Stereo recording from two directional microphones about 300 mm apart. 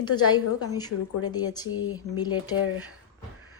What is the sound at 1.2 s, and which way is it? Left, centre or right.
A woman's voice, centre.